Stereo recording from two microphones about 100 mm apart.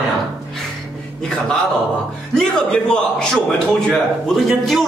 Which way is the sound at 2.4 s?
5° left (ahead or behind).